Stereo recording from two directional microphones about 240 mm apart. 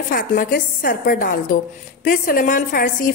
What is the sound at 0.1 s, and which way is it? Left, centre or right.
A woman's voice, left.